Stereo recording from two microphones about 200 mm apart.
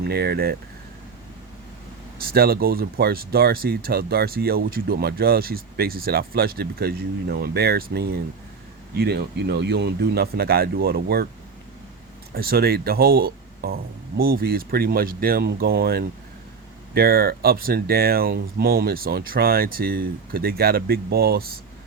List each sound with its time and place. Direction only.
0.0 s speech: 55° right (ahead or behind)
2.2 s speech: 50° right (ahead or behind)
12.3 s speech: 50° right (ahead or behind)